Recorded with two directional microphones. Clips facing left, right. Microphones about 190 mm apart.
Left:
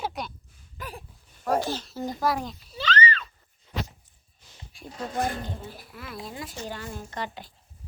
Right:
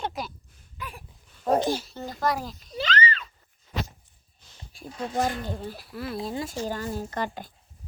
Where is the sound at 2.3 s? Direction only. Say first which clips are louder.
Right 2 dB; centre (ahead or behind).